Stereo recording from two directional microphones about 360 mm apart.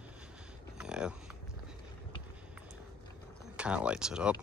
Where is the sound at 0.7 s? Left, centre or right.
Centre.